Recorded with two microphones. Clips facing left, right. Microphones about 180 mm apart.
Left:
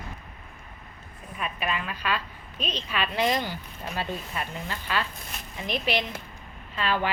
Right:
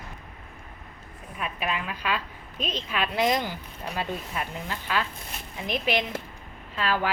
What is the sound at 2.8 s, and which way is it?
A woman's voice, 10° right (ahead or behind).